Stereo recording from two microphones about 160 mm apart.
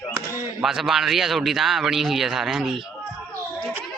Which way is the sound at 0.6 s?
Centre (ahead or behind).